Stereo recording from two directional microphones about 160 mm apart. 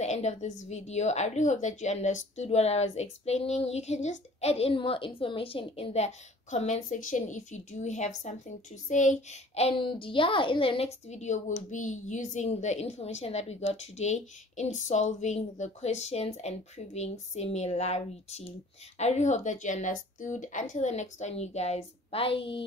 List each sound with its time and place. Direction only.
0.0 s a woman's voice: 45° left (ahead or behind)